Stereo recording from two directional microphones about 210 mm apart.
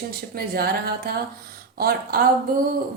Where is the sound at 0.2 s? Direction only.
45° right (ahead or behind).